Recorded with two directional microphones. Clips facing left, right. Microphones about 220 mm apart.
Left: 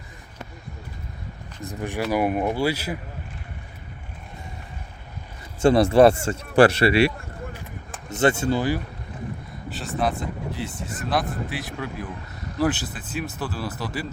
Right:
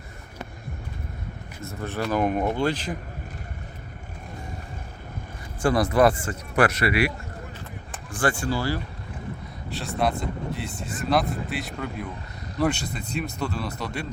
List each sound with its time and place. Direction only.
1.6 s speech: 15° left (ahead or behind)
5.6 s speech: 25° left (ahead or behind)
8.1 s speech: 25° left (ahead or behind)
9.6 s speech: centre (ahead or behind)